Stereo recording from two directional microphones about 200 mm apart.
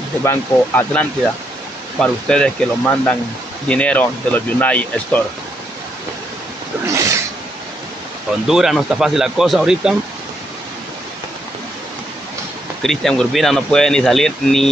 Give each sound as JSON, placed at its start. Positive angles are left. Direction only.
{"t": 0.2, "sound": "speech", "side_deg": 10}
{"t": 6.9, "sound": "a sound", "side_deg": -15}
{"t": 8.5, "sound": "speech", "side_deg": 0}
{"t": 12.8, "sound": "speech", "side_deg": 0}